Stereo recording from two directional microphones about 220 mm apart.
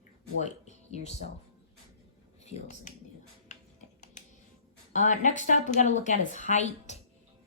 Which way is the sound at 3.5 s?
30° left (ahead or behind).